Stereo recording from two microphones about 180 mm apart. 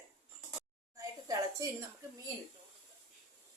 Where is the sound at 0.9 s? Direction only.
20° right (ahead or behind).